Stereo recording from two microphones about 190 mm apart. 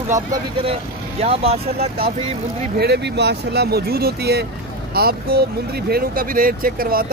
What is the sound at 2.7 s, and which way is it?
Speech, 60° right (ahead or behind).